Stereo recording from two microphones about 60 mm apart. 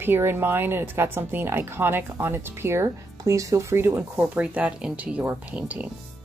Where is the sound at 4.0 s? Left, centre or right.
Right.